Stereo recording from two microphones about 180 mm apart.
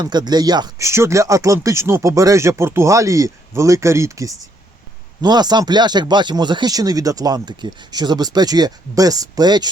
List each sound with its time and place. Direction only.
0.0 s speech: 25° right (ahead or behind)